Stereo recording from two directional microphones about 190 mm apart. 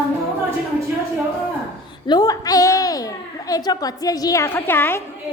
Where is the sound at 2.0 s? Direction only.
20° left (ahead or behind).